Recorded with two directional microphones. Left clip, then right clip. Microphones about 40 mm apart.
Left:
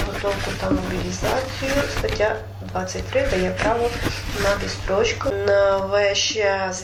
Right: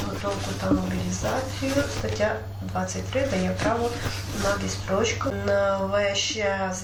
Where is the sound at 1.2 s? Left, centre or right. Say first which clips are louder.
Left 5 dB; left.